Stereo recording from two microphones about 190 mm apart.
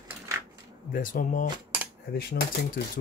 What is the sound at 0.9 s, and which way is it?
Speech, 45° left (ahead or behind).